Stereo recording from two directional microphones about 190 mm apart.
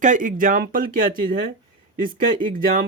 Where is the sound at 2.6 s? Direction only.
50° right (ahead or behind).